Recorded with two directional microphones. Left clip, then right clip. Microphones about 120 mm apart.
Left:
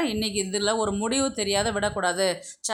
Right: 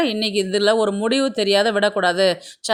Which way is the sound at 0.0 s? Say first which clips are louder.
Right 7 dB; 30° right (ahead or behind).